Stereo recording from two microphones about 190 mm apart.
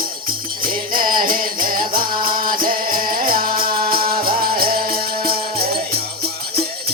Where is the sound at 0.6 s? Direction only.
50° right (ahead or behind).